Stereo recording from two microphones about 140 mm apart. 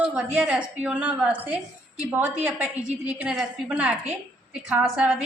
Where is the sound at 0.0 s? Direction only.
5° right (ahead or behind).